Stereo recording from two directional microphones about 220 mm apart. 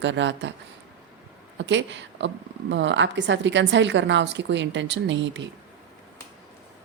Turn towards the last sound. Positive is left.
turn(degrees=-55)  # may be behind; listen again after turning